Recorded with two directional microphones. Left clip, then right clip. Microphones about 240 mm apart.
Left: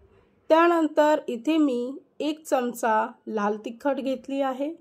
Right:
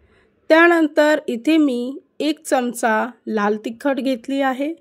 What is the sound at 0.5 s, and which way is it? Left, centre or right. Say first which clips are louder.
A woman's voice: right 6 dB; right.